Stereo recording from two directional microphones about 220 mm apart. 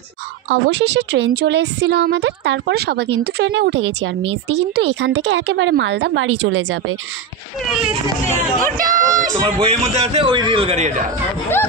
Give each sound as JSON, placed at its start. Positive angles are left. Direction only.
{"t": 0.5, "sound": "a woman's voice", "side_deg": -50}
{"t": 7.6, "sound": "speech", "side_deg": 0}
{"t": 8.7, "sound": "speech", "side_deg": -40}
{"t": 9.6, "sound": "a man's voice", "side_deg": -30}